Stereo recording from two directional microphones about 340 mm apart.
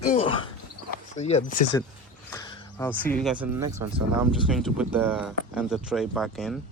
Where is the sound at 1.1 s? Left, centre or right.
Centre.